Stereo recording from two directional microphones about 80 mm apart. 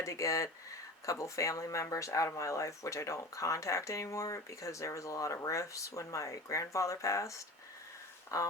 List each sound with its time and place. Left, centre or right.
0.0 s speech: left